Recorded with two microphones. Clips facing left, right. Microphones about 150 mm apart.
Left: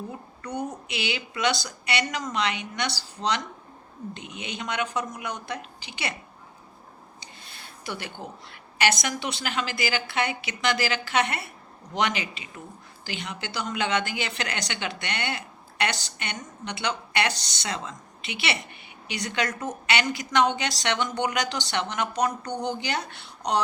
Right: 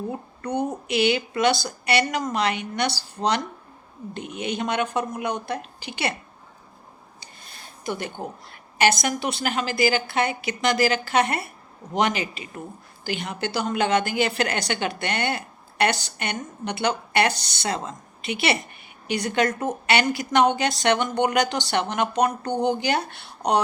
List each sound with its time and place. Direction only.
0.1 s a woman's voice: 55° right (ahead or behind)
7.4 s a sound: 40° right (ahead or behind)
9.0 s a woman's voice: 45° right (ahead or behind)